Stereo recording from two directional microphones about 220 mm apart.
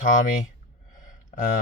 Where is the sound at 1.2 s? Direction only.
35° left (ahead or behind).